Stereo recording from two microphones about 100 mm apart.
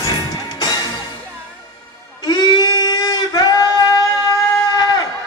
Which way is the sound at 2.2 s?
45° left (ahead or behind).